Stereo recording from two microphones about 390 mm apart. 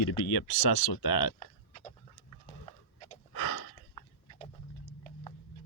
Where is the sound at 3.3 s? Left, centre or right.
Left.